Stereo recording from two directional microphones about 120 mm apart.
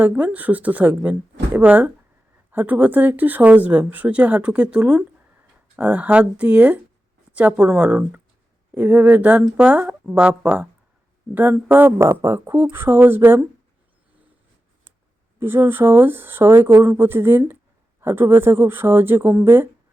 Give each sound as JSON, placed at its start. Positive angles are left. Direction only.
{"t": 0.0, "sound": "speech", "side_deg": -10}
{"t": 15.4, "sound": "speech", "side_deg": -20}